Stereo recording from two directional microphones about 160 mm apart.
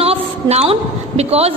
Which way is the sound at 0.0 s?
40° right (ahead or behind).